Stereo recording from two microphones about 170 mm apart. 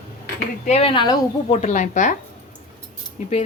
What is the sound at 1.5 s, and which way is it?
Speech, 45° left (ahead or behind).